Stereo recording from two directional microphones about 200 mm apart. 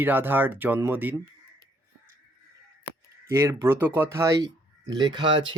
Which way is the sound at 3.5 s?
15° right (ahead or behind).